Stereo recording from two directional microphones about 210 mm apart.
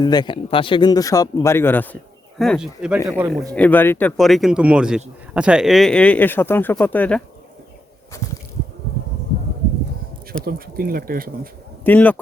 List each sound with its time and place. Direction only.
0.0 s speech: 20° left (ahead or behind); by 3.0 s 5° right (ahead or behind)
3.1 s speech: 15° right (ahead or behind)
3.5 s speech: 5° left (ahead or behind)
10.4 s speech: 45° right (ahead or behind)
11.8 s speech: 10° left (ahead or behind)